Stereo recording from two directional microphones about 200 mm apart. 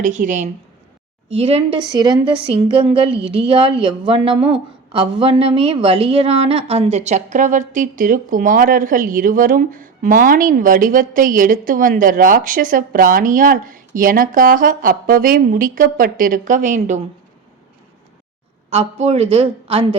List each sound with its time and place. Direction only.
0.0 s a woman's voice: 40° right (ahead or behind)
18.7 s a woman's voice: 30° right (ahead or behind)